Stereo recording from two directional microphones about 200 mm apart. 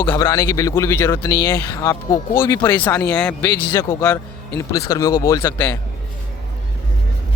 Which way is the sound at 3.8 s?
15° left (ahead or behind).